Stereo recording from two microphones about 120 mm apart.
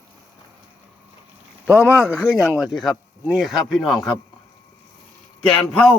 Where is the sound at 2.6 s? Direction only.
Centre (ahead or behind).